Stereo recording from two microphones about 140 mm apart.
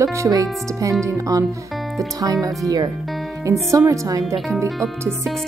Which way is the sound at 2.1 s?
25° right (ahead or behind).